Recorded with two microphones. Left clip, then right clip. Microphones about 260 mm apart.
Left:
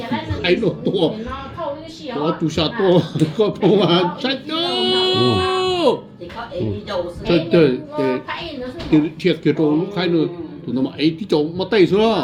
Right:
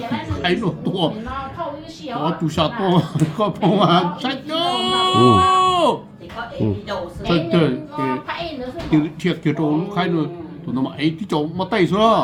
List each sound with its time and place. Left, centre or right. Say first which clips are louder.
0.4 s a man's voice: left 4 dB; centre
2.2 s speech: even; centre
7.3 s a man's voice: left 4 dB; centre
9.4 s a man's voice: left 2 dB; centre